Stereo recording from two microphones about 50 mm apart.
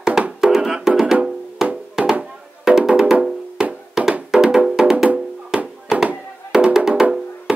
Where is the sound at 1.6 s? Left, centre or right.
Centre.